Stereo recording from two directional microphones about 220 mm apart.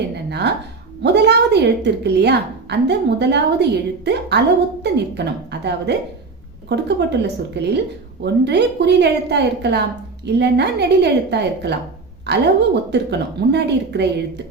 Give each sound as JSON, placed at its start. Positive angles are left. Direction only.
{"t": 0.3, "sound": "a woman's voice", "side_deg": -50}